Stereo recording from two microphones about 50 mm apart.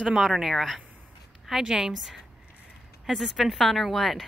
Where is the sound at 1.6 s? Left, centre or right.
Centre.